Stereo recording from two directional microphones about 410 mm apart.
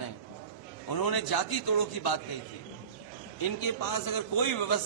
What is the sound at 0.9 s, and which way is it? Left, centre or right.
A man's voice, left.